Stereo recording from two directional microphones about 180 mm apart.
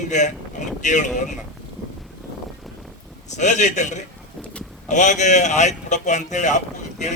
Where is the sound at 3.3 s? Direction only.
40° left (ahead or behind).